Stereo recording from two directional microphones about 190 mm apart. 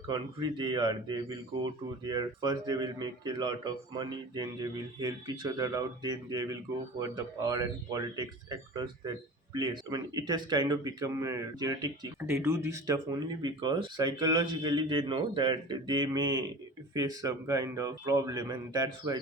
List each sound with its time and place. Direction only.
0.1 s speech: 25° right (ahead or behind)